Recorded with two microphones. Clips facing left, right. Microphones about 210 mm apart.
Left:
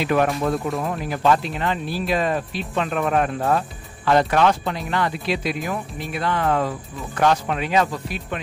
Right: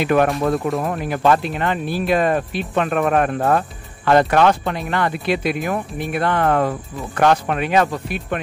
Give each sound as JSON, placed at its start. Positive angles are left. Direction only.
{"t": 0.0, "sound": "speech", "side_deg": -55}